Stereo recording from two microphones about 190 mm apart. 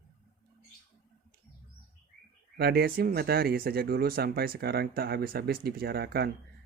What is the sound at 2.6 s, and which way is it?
Speech, 55° right (ahead or behind).